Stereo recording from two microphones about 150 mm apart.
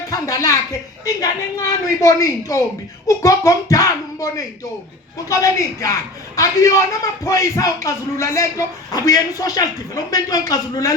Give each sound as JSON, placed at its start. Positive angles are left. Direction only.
{"t": 0.1, "sound": "a man's voice", "side_deg": 20}